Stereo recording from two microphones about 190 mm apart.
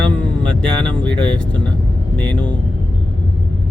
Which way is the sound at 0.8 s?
5° left (ahead or behind).